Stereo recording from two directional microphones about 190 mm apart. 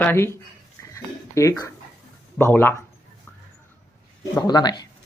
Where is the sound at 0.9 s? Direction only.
15° left (ahead or behind).